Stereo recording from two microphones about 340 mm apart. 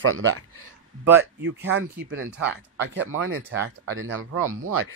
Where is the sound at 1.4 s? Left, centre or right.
Right.